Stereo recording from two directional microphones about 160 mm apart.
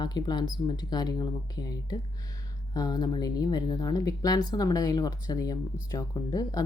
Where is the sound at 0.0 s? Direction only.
25° left (ahead or behind).